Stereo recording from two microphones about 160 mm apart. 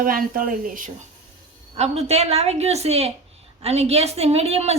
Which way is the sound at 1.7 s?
40° right (ahead or behind).